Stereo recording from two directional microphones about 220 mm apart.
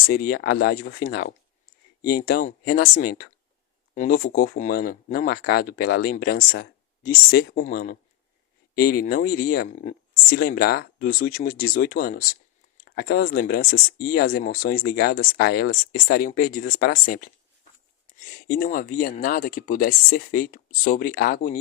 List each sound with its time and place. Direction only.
0.1 s speech: 45° left (ahead or behind)
9.6 s speech: 35° left (ahead or behind)
18.1 s speech: 40° left (ahead or behind)